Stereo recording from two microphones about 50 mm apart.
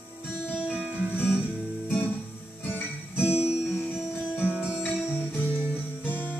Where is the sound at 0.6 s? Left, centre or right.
Centre.